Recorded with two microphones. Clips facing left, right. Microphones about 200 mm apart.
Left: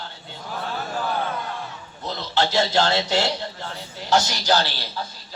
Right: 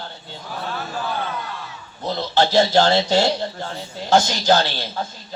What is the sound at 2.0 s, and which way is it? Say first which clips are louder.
Speech: right 4 dB; 50° right (ahead or behind).